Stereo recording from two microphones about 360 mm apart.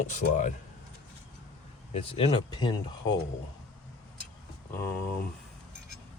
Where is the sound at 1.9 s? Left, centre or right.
Centre.